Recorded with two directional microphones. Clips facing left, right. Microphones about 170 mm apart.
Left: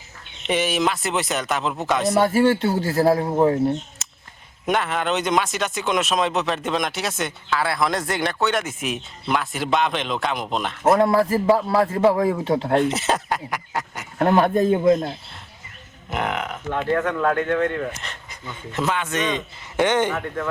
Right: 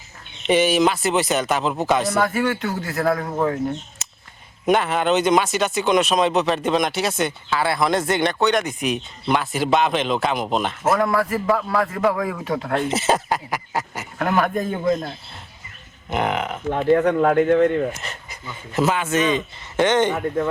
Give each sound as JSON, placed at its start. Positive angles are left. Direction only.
{"t": 0.4, "sound": "speech", "side_deg": 0}
{"t": 2.1, "sound": "a man's voice", "side_deg": 30}
{"t": 4.0, "sound": "a sound", "side_deg": 0}
{"t": 4.6, "sound": "speech", "side_deg": 0}
{"t": 10.9, "sound": "a man's voice", "side_deg": 25}
{"t": 12.7, "sound": "speech", "side_deg": 0}
{"t": 14.2, "sound": "a man's voice", "side_deg": 30}
{"t": 16.0, "sound": "speech", "side_deg": 0}
{"t": 16.6, "sound": "speech", "side_deg": -20}
{"t": 18.0, "sound": "speech", "side_deg": -5}
{"t": 19.7, "sound": "speech", "side_deg": 10}
{"t": 20.1, "sound": "speech", "side_deg": -25}